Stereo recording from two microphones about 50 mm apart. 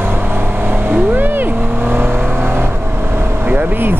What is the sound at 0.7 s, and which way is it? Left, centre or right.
Vehicle, right.